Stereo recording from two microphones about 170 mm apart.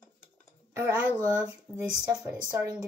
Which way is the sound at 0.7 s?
15° right (ahead or behind).